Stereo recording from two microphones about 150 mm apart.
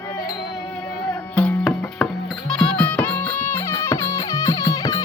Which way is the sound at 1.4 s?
10° left (ahead or behind).